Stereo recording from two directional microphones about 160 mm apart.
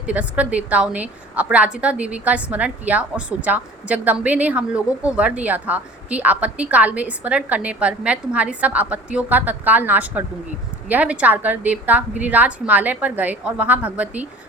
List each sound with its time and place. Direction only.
0.0 s a woman's voice: 10° right (ahead or behind)